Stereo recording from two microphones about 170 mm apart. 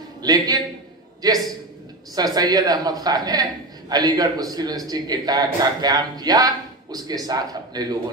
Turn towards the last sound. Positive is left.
turn(degrees=-25)  # may be behind; listen again after turning